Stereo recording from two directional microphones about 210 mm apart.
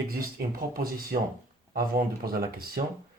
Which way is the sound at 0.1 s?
45° right (ahead or behind).